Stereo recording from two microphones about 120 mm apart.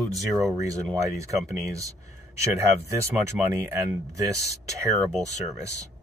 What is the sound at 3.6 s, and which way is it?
Speech, 20° right (ahead or behind).